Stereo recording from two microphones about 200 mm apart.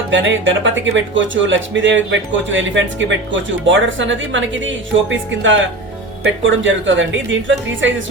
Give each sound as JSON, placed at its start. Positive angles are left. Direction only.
{"t": 0.1, "sound": "speech", "side_deg": -65}